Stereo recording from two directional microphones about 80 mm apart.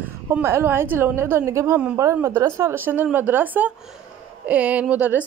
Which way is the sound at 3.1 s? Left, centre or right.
Right.